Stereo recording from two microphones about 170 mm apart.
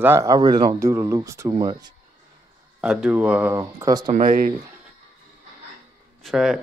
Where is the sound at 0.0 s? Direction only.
15° right (ahead or behind).